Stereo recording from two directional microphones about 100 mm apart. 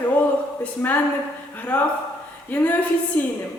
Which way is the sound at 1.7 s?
20° left (ahead or behind).